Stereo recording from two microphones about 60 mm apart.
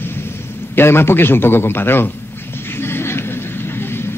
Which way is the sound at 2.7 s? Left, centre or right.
Left.